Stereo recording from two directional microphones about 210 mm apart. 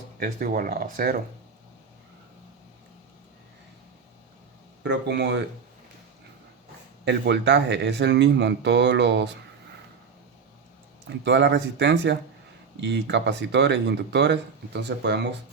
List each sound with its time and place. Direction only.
0.2 s speech: 45° right (ahead or behind)
4.8 s speech: 55° right (ahead or behind)
7.0 s speech: 55° right (ahead or behind)
11.3 s speech: 55° right (ahead or behind)